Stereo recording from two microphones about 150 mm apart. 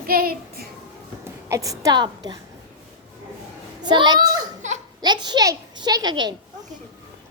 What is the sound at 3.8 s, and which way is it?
Speech, 30° right (ahead or behind).